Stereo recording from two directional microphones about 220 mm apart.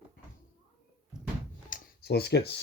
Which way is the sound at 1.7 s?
45° left (ahead or behind).